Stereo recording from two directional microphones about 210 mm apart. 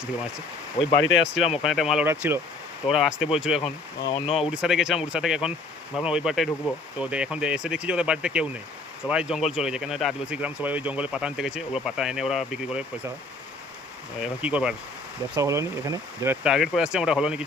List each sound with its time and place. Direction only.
0.8 s speech: 25° left (ahead or behind)
1.2 s speech: 5° right (ahead or behind)
3.6 s speech: 25° left (ahead or behind)
4.5 s speech: 5° right (ahead or behind)
14.2 s speech: 5° right (ahead or behind)